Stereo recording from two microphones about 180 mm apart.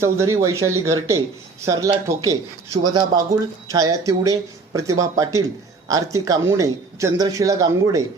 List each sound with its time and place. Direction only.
0.0 s speech: 15° right (ahead or behind)